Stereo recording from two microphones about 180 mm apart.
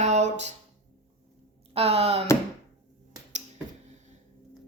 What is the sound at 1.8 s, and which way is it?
Speech, 35° right (ahead or behind).